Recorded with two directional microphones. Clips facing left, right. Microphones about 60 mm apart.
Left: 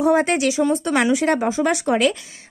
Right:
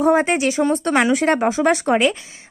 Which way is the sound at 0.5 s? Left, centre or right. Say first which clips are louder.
Right 1 dB; right.